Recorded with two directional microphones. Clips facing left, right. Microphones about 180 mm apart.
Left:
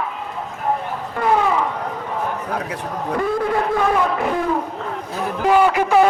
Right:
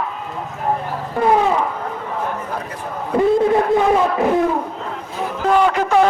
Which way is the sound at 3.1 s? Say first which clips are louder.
Right 6 dB; 25° right (ahead or behind).